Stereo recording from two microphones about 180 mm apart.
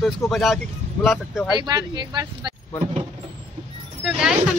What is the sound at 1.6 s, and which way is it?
Speech, 25° right (ahead or behind).